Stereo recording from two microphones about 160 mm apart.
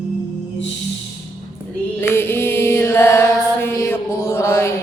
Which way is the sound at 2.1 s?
15° left (ahead or behind).